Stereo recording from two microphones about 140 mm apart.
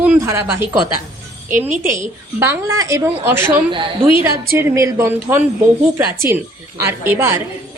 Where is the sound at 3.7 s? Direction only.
35° right (ahead or behind).